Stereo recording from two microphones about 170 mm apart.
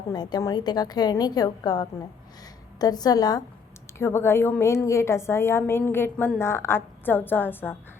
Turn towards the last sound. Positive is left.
turn(degrees=10)  # may be behind; listen again after turning